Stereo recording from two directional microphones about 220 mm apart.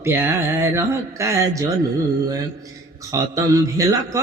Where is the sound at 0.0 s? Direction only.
10° right (ahead or behind).